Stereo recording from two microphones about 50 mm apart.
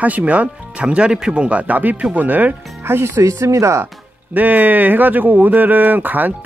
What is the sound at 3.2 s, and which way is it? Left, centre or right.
Speech, right.